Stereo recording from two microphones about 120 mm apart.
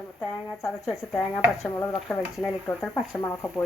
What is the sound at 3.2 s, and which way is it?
Speech, 20° left (ahead or behind).